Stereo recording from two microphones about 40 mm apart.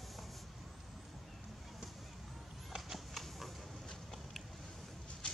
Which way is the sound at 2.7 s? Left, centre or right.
Centre.